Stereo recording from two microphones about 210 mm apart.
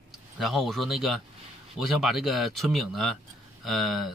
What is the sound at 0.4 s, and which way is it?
Speech, centre (ahead or behind).